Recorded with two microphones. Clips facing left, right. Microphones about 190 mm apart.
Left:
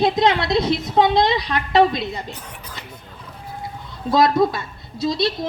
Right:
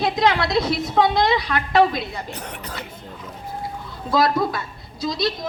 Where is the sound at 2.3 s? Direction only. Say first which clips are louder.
Right 5 dB; 70° right (ahead or behind).